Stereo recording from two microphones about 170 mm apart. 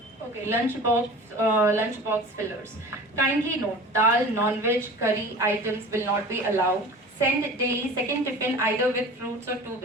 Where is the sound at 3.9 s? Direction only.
15° right (ahead or behind).